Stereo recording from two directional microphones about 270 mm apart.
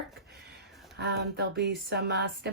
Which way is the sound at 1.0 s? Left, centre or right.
Right.